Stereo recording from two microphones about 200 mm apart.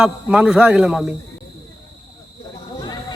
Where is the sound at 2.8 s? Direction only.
20° left (ahead or behind).